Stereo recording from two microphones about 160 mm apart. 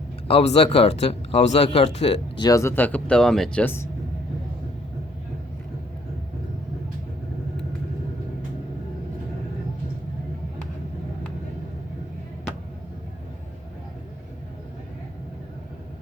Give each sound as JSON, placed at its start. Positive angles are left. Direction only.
{"t": 0.3, "sound": "speech", "side_deg": 40}
{"t": 2.4, "sound": "speech", "side_deg": 20}